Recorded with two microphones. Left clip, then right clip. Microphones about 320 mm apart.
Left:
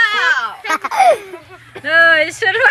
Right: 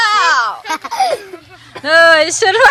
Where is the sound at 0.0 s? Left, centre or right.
Centre.